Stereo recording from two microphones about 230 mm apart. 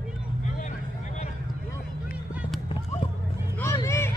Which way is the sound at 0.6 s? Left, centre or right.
Left.